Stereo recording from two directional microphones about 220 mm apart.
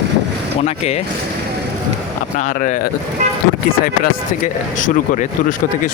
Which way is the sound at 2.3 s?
35° left (ahead or behind).